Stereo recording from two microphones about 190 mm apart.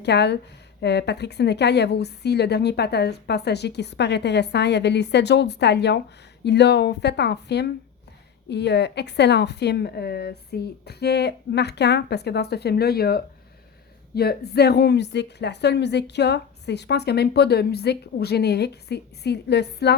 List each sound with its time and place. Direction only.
0.0 s a woman's voice: 65° left (ahead or behind)